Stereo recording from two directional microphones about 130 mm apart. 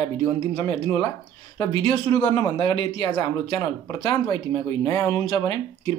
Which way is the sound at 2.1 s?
40° left (ahead or behind).